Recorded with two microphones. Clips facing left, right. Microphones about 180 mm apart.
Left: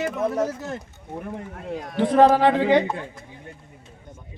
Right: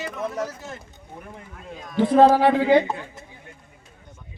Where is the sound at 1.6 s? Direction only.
70° left (ahead or behind).